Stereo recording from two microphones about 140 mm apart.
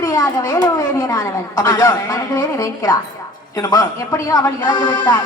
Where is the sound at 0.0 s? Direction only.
20° left (ahead or behind).